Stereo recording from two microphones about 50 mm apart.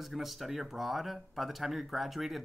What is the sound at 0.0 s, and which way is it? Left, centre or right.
Speech, centre.